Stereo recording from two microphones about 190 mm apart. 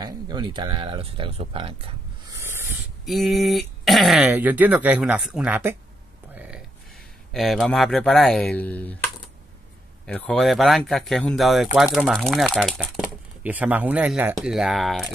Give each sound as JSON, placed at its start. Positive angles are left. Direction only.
{"t": 0.0, "sound": "speech", "side_deg": -20}
{"t": 2.3, "sound": "a sound", "side_deg": -15}
{"t": 3.1, "sound": "speech", "side_deg": 0}
{"t": 6.3, "sound": "a sound", "side_deg": -5}
{"t": 7.3, "sound": "speech", "side_deg": 0}
{"t": 10.0, "sound": "speech", "side_deg": 5}